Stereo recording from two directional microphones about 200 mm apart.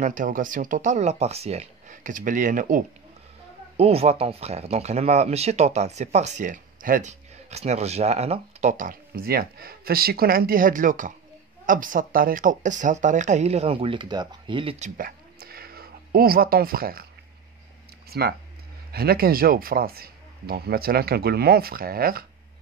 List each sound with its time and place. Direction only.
0.0 s speech: 40° right (ahead or behind)
3.7 s speech: 30° right (ahead or behind)
15.0 s a sound: 50° right (ahead or behind)
18.1 s speech: 50° right (ahead or behind)